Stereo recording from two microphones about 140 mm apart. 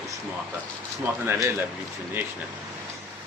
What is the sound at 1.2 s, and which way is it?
Speech, 15° right (ahead or behind).